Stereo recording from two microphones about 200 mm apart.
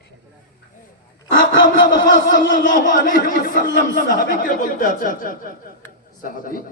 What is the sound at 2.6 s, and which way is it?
Speech, 40° left (ahead or behind).